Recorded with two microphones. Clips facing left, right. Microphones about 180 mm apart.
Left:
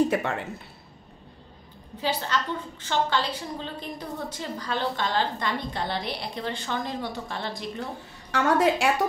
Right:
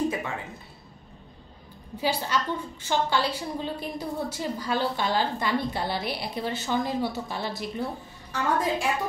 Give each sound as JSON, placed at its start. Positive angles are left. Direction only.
{"t": 0.1, "sound": "speech", "side_deg": 70}
{"t": 2.0, "sound": "a woman's voice", "side_deg": -10}
{"t": 8.3, "sound": "a woman's voice", "side_deg": 80}